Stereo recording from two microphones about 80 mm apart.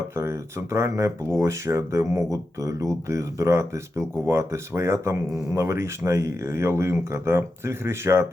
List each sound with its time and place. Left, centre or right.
0.2 s speech: right